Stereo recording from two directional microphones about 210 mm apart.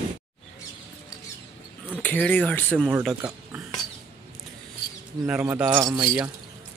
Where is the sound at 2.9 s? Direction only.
5° right (ahead or behind).